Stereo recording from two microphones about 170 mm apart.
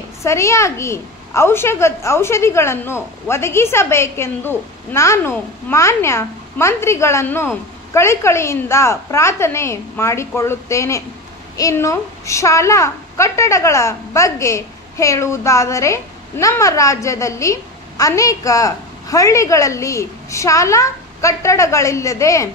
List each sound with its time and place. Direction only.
0.2 s a woman's voice: 15° left (ahead or behind)